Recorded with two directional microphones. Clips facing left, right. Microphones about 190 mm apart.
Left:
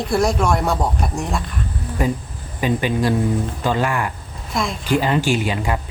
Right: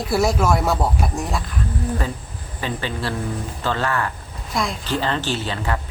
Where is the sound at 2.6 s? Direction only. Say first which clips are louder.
Left 7 dB; 15° left (ahead or behind).